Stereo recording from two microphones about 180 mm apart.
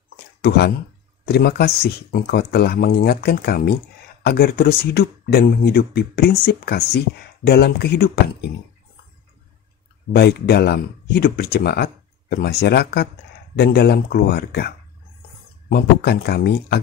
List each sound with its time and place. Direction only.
0.4 s speech: 65° left (ahead or behind)
10.1 s speech: 65° left (ahead or behind)
15.7 s speech: 65° left (ahead or behind)